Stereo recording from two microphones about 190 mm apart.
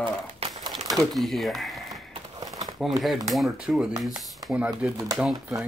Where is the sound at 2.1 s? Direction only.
20° right (ahead or behind).